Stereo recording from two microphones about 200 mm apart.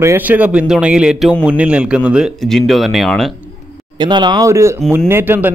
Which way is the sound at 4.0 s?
20° right (ahead or behind).